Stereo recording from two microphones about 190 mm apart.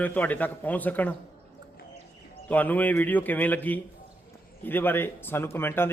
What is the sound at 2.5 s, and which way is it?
Speech, 10° left (ahead or behind).